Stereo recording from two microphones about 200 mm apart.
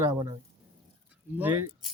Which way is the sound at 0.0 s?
15° right (ahead or behind).